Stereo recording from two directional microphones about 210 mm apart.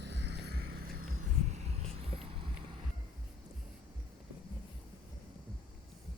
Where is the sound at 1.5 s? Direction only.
30° right (ahead or behind).